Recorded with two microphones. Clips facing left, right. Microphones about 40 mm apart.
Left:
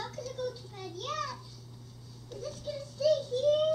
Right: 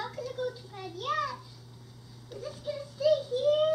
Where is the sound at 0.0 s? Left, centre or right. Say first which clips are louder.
Right 2 dB; centre.